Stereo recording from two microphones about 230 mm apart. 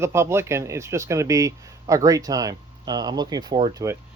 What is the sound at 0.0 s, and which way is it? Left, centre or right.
Speech, centre.